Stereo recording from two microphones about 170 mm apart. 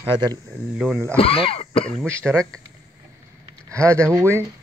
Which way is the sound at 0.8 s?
Centre (ahead or behind).